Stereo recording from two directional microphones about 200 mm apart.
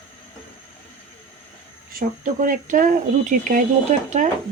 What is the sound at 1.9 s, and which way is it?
Speech, 45° right (ahead or behind).